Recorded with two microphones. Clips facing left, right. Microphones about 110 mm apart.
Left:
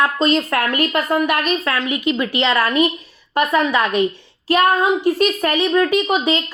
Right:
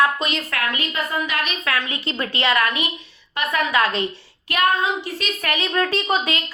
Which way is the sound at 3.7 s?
15° left (ahead or behind).